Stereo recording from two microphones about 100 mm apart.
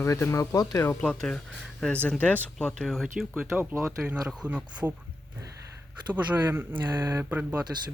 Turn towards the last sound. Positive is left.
turn(degrees=-10)  # may be behind; listen again after turning